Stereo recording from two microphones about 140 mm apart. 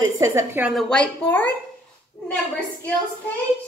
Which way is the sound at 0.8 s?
5° left (ahead or behind).